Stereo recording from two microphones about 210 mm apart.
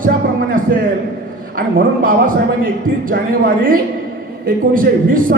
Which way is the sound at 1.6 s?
40° right (ahead or behind).